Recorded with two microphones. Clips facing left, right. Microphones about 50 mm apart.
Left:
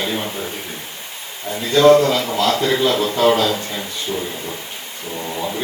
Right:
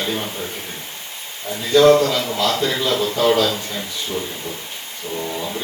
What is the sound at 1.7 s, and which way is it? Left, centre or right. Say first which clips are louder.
A man's voice: left 1 dB; left.